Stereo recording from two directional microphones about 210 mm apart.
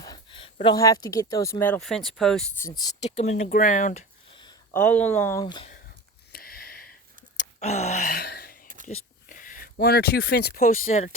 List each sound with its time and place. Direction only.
0.0 s speech: 20° left (ahead or behind); by 2.4 s centre (ahead or behind)
2.6 s speech: 15° left (ahead or behind)
3.0 s speech: 30° left (ahead or behind)
4.3 s a sound: 20° left (ahead or behind)
4.7 s speech: 10° left (ahead or behind)
6.3 s a sound: 45° left (ahead or behind)
7.3 s gasp: 30° left (ahead or behind); by 8.5 s 45° left (ahead or behind)
8.6 s a sound: 40° right (ahead or behind)
9.3 s speech: 40° left (ahead or behind)